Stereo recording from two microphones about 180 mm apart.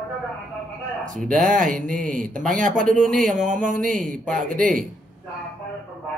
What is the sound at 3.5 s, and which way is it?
Speech, 45° right (ahead or behind).